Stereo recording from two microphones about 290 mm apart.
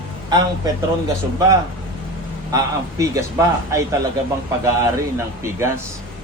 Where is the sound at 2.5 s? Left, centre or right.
Centre.